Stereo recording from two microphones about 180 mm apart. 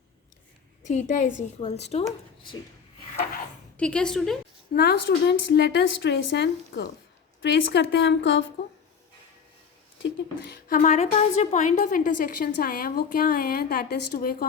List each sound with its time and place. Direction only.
0.9 s a woman's voice: 40° left (ahead or behind)
3.8 s a woman's voice: 5° left (ahead or behind)
4.7 s a woman's voice: 60° left (ahead or behind); by 8.4 s 90° left
10.0 s speech: 65° left (ahead or behind)
10.8 s a woman's voice: 40° left (ahead or behind)